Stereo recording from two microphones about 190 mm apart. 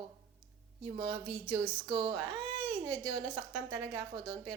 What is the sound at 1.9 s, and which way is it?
Speech, 20° right (ahead or behind).